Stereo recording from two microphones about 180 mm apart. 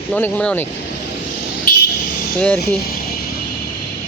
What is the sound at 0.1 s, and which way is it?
Speech, 5° left (ahead or behind).